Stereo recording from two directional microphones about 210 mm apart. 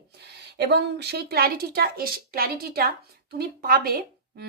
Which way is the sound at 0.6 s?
55° right (ahead or behind).